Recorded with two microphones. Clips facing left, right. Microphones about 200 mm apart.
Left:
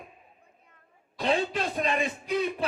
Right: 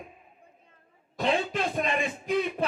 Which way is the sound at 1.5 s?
45° right (ahead or behind).